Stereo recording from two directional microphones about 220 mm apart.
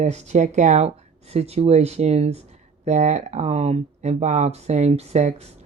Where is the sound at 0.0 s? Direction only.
30° right (ahead or behind).